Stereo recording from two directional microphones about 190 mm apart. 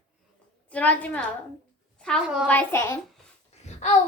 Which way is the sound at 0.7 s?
10° left (ahead or behind).